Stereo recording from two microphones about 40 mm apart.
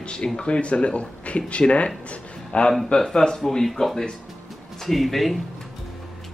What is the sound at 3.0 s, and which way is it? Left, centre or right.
Speech, centre.